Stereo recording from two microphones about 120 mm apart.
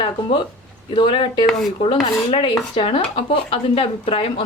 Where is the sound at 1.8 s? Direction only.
45° left (ahead or behind).